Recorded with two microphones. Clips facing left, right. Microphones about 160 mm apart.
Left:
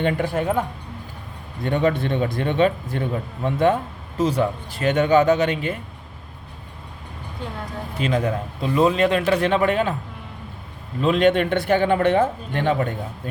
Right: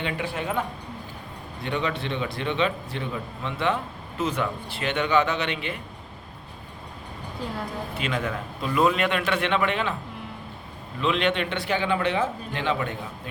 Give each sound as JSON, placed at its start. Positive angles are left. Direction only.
{"t": 0.0, "sound": "a man's voice", "side_deg": 50}
{"t": 1.6, "sound": "a man's voice", "side_deg": 50}
{"t": 7.9, "sound": "a man's voice", "side_deg": 40}
{"t": 11.0, "sound": "a man's voice", "side_deg": 45}